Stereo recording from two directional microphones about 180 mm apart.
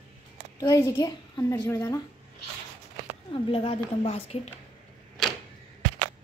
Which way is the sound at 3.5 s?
30° left (ahead or behind).